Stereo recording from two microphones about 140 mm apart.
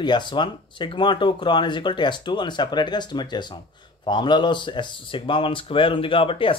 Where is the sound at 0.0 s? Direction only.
35° left (ahead or behind).